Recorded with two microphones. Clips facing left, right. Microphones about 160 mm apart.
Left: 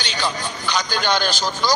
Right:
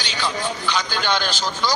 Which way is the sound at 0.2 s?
40° left (ahead or behind).